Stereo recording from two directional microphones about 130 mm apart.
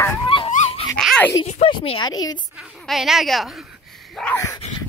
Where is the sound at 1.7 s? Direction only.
50° left (ahead or behind).